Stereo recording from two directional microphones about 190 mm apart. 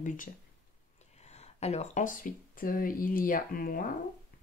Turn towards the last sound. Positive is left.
turn(degrees=50)  # may be behind; listen again after turning